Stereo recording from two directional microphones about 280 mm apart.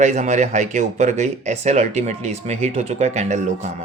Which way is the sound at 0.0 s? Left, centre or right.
Right.